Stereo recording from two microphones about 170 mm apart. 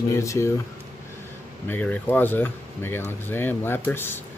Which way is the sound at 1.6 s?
10° left (ahead or behind).